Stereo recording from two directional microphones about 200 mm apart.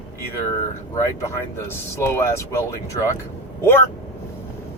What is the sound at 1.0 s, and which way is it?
Speech, 15° left (ahead or behind).